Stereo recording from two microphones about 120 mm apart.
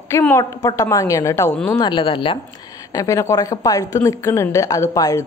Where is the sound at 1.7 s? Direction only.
40° left (ahead or behind).